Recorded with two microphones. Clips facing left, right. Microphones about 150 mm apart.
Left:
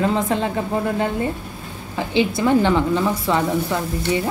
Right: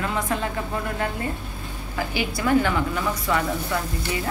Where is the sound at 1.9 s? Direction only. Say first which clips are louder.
Left 7 dB; 25° left (ahead or behind).